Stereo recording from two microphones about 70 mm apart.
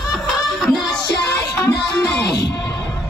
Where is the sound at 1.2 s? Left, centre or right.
Left.